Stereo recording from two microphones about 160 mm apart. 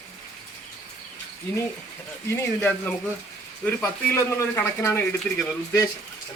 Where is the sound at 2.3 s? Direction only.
15° left (ahead or behind).